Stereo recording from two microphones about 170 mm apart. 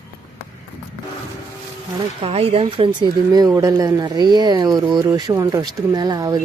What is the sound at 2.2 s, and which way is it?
Speech, 35° right (ahead or behind).